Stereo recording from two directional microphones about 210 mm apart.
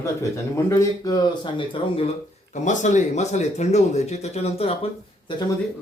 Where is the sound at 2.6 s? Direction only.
35° left (ahead or behind).